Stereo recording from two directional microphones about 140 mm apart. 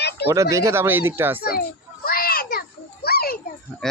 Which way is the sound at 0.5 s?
20° right (ahead or behind).